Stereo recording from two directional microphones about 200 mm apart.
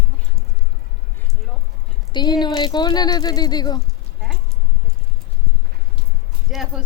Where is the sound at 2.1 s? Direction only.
20° left (ahead or behind).